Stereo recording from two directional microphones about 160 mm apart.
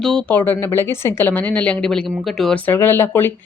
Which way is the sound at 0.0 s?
5° left (ahead or behind).